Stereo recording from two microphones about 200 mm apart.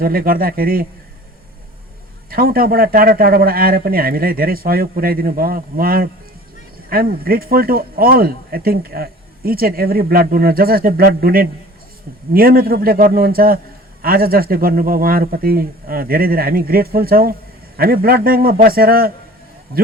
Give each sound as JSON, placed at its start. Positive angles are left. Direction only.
{"t": 0.0, "sound": "speech", "side_deg": -45}
{"t": 2.3, "sound": "speech", "side_deg": -45}